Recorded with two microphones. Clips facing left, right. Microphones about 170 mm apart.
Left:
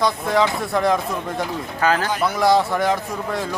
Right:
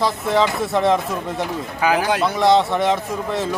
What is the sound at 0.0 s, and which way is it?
Speech, centre (ahead or behind).